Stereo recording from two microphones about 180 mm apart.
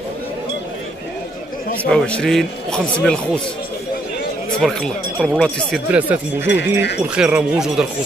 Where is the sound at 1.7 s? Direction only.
5° left (ahead or behind).